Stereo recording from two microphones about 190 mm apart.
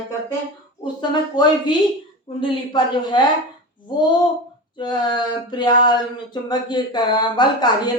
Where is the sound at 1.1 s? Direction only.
25° left (ahead or behind).